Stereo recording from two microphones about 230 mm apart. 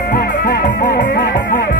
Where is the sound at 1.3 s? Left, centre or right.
Left.